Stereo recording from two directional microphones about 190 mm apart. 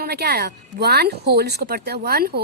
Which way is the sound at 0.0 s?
55° right (ahead or behind).